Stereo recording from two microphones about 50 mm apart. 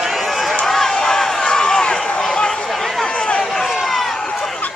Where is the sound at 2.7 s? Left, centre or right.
Centre.